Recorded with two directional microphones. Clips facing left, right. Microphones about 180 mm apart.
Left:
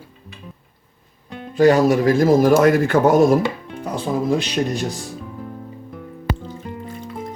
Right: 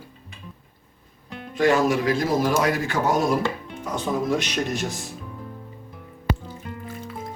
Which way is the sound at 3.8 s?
30° left (ahead or behind).